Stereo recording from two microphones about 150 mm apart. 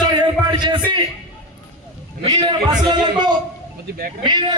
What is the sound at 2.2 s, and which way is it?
A man's voice, 25° right (ahead or behind).